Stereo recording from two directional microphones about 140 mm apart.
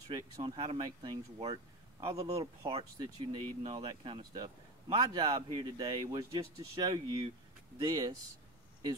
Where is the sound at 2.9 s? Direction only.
30° right (ahead or behind).